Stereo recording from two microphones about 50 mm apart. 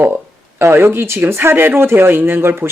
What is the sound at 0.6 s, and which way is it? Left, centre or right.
Speech, right.